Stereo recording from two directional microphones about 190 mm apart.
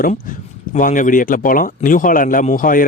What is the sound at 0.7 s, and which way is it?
Speech, 45° left (ahead or behind).